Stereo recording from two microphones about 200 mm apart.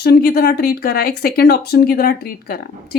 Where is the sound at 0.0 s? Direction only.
55° left (ahead or behind).